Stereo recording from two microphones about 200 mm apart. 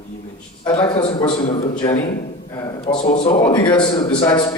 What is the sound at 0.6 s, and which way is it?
A man's voice, 25° left (ahead or behind).